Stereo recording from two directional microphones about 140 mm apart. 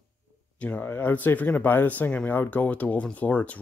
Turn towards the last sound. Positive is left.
turn(degrees=10)  # may be behind; listen again after turning